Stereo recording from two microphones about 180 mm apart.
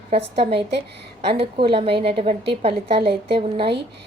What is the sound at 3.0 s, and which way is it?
Speech, 65° right (ahead or behind).